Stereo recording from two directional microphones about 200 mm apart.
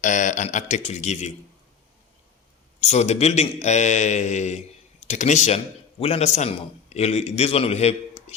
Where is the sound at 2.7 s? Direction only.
35° left (ahead or behind).